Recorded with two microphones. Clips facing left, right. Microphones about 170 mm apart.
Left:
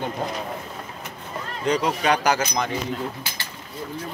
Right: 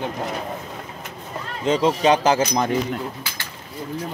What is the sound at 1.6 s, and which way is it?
Speech, 25° right (ahead or behind).